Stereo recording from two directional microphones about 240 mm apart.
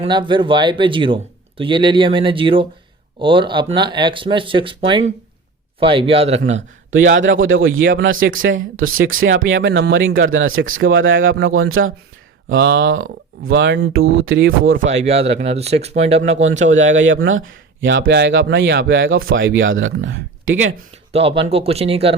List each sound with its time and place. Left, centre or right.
0.0 s a man's voice: centre
6.5 s speech: right
14.6 s a man's voice: right
16.7 s speech: right
21.1 s a man's voice: right